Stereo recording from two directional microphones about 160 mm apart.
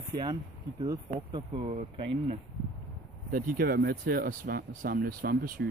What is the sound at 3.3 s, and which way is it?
Speech, 60° right (ahead or behind).